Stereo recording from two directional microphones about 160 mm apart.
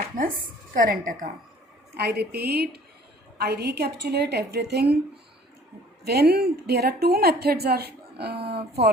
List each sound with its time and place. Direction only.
0.7 s a woman's voice: 60° right (ahead or behind)
2.0 s a woman's voice: 90° right
6.1 s a woman's voice: 80° right